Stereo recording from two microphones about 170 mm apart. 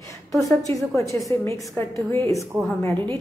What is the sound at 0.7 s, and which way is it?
A woman's voice, 20° left (ahead or behind).